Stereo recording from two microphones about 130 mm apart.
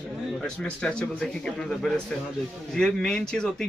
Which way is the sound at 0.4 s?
5° left (ahead or behind).